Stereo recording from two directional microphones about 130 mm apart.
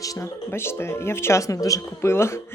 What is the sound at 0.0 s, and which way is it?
Speech, 25° left (ahead or behind).